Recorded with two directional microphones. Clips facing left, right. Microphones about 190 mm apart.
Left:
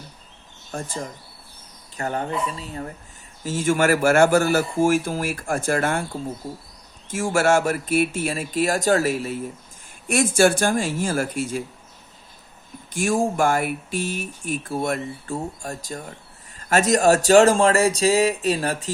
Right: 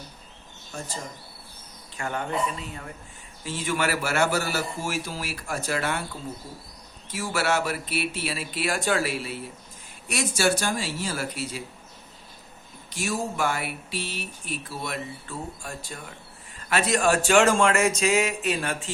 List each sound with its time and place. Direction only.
0.7 s speech: 50° left (ahead or behind)
2.0 s speech: 35° left (ahead or behind)
3.4 s speech: 45° left (ahead or behind)
12.9 s speech: 50° left (ahead or behind)